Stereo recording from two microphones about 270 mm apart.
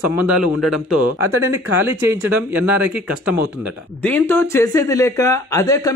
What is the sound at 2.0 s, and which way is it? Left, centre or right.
Speech, centre.